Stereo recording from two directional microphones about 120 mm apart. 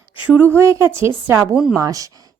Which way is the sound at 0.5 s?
20° right (ahead or behind).